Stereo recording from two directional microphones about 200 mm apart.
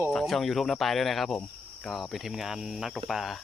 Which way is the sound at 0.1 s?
Centre (ahead or behind).